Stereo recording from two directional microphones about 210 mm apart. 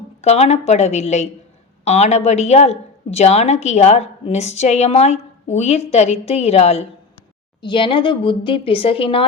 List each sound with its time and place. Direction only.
0.2 s a woman's voice: 30° left (ahead or behind)